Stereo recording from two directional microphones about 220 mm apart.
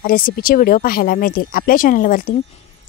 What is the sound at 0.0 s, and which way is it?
Speech, 40° left (ahead or behind).